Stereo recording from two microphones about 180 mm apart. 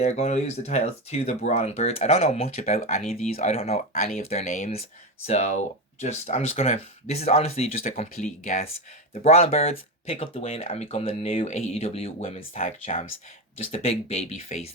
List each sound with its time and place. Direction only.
0.0 s speech: 35° left (ahead or behind)
12.4 s speech: 45° left (ahead or behind)